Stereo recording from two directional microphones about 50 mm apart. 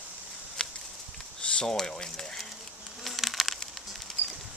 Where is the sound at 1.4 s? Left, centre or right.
Centre.